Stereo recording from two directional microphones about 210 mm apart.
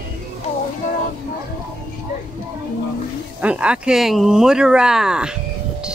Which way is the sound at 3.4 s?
5° right (ahead or behind).